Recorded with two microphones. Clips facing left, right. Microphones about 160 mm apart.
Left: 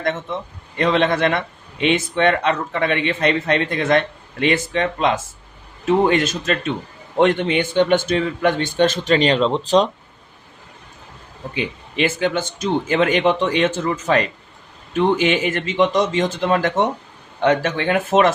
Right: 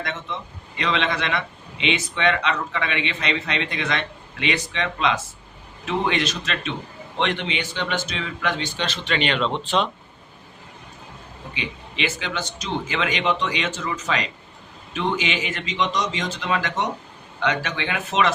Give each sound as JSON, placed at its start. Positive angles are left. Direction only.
{"t": 0.0, "sound": "a man's voice", "side_deg": 50}
{"t": 11.5, "sound": "a man's voice", "side_deg": 50}